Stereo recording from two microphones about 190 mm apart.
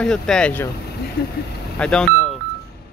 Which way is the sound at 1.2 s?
50° left (ahead or behind).